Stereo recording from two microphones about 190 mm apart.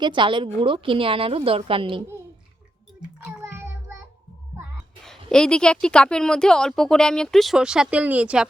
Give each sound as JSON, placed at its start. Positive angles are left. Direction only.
{"t": 0.0, "sound": "a woman's voice", "side_deg": -25}
{"t": 3.2, "sound": "child singing", "side_deg": -5}
{"t": 5.0, "sound": "a woman's voice", "side_deg": 5}